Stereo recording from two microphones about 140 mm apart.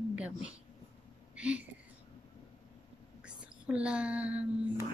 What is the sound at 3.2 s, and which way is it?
Speech, 5° right (ahead or behind).